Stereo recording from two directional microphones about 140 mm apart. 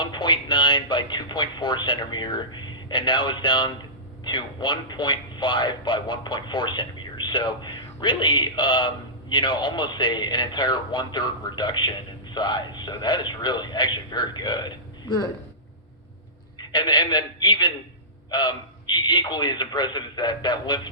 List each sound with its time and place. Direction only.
0.0 s a man's voice: 35° left (ahead or behind)
16.6 s a man's voice: 35° left (ahead or behind)